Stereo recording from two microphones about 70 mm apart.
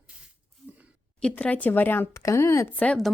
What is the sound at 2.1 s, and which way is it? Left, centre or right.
Speech, left.